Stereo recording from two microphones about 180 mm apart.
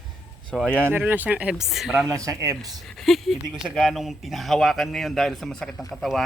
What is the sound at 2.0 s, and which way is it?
Speech, 20° right (ahead or behind).